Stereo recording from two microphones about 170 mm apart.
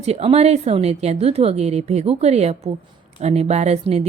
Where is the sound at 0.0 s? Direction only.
40° right (ahead or behind).